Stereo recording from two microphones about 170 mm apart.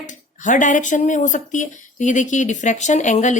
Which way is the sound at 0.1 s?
50° left (ahead or behind).